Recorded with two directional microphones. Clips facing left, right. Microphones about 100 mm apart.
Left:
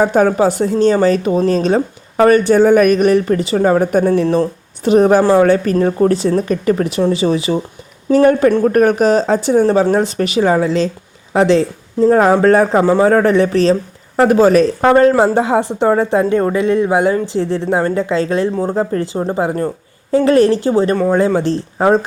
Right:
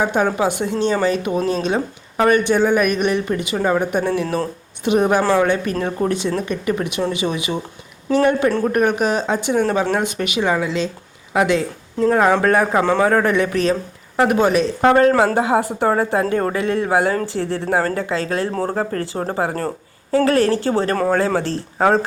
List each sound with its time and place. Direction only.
0.0 s a woman's voice: 45° left (ahead or behind); by 22.0 s 15° left (ahead or behind)